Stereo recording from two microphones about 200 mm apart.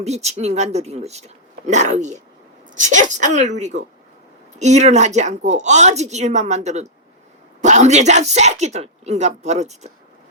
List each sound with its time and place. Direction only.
0.0 s a woman's voice: 35° right (ahead or behind)